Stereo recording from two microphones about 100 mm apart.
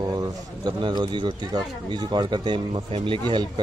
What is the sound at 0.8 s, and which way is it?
A man's voice, 50° right (ahead or behind).